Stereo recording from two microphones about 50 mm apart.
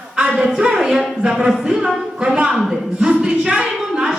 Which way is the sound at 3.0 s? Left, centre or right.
Centre.